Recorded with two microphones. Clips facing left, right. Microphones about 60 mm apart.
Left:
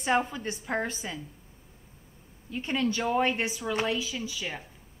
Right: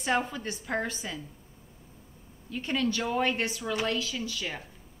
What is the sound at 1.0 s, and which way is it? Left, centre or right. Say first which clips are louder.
Speech: even; centre.